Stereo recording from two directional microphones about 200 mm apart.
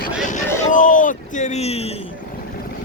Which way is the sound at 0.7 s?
40° left (ahead or behind).